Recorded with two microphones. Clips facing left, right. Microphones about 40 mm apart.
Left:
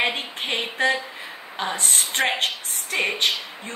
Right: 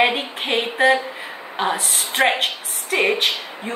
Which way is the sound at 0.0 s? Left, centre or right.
Centre.